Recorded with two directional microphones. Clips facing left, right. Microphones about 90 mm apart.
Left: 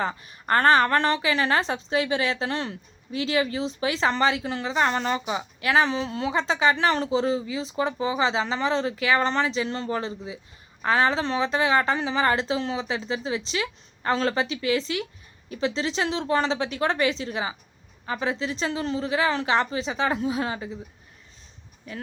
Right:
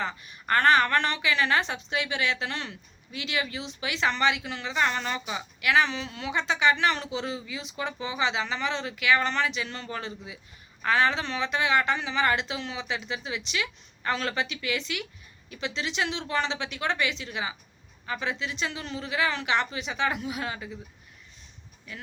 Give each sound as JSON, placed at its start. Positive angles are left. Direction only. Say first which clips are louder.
{"t": 0.0, "sound": "a woman's voice", "louder": "left 4 dB", "side_deg": 35}